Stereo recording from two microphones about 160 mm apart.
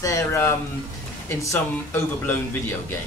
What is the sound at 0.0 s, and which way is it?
Speech, 20° left (ahead or behind).